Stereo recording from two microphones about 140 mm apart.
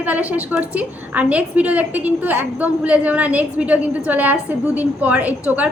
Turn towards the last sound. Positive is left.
turn(degrees=-10)  # may be behind; listen again after turning